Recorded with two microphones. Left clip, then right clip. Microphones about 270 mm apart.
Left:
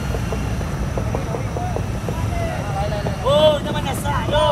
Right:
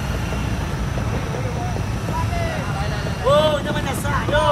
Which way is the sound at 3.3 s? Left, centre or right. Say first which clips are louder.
Left 2 dB; centre.